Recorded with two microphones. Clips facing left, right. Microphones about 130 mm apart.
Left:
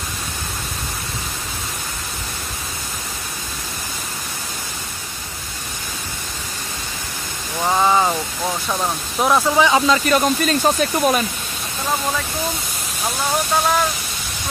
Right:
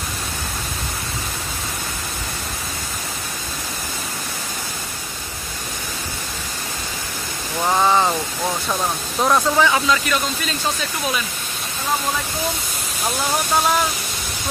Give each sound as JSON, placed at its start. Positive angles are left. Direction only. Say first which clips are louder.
{"t": 7.6, "sound": "a sound", "louder": "left 1 dB", "side_deg": 0}
{"t": 9.2, "sound": "speech", "louder": "left 1 dB", "side_deg": 10}
{"t": 9.7, "sound": "speech", "louder": "left 3 dB", "side_deg": 25}
{"t": 10.1, "sound": "speech", "louder": "left 7 dB", "side_deg": 50}